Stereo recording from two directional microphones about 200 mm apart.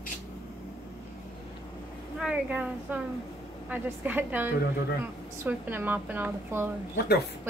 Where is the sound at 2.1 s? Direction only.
5° right (ahead or behind).